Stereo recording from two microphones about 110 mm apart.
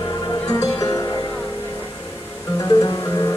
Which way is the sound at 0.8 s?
35° left (ahead or behind).